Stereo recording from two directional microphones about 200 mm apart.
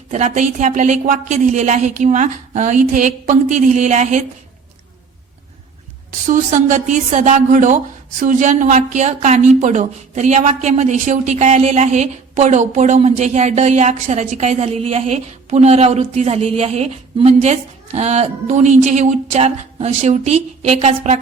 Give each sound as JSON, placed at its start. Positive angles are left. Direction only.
{"t": 0.1, "sound": "speech", "side_deg": -35}
{"t": 6.2, "sound": "speech", "side_deg": -40}